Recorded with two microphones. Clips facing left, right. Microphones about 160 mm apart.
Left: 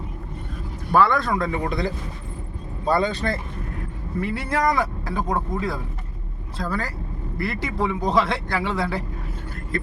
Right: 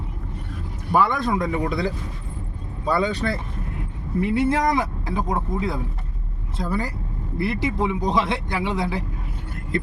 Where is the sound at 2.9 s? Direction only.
10° right (ahead or behind).